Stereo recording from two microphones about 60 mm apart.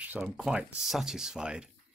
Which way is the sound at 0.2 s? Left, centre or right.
Centre.